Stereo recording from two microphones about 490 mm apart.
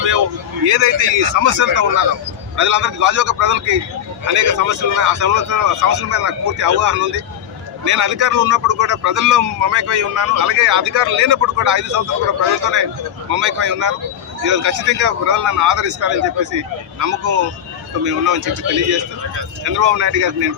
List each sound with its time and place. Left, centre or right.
0.6 s a man's voice: right